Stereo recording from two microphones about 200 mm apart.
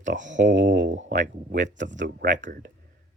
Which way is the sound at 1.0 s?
45° right (ahead or behind).